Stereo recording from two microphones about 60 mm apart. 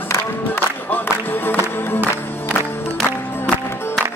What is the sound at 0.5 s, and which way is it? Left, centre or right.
Music, left.